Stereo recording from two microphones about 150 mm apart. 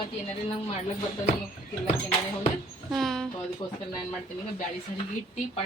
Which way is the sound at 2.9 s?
Centre (ahead or behind).